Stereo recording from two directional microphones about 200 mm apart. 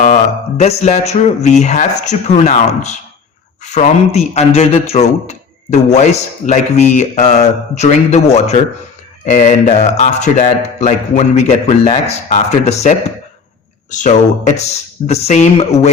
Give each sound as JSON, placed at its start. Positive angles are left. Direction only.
{"t": 0.0, "sound": "a man's voice", "side_deg": 35}